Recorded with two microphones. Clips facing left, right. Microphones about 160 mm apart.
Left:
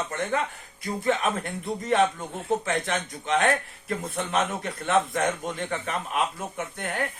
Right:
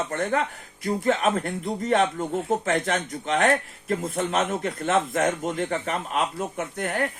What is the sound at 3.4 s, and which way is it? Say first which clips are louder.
A man's voice: right 3 dB; 35° right (ahead or behind).